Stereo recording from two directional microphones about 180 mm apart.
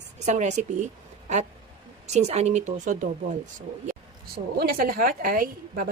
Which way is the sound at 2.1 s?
40° right (ahead or behind).